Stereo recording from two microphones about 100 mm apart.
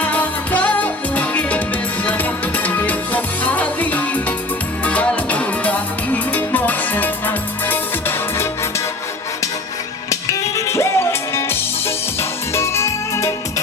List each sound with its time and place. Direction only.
0.0 s music: 15° left (ahead or behind)
2.6 s music: 15° left (ahead or behind)
10.1 s music: 30° left (ahead or behind)
12.5 s music: 25° left (ahead or behind)